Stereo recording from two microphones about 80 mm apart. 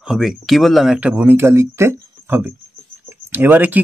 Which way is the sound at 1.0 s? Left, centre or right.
Right.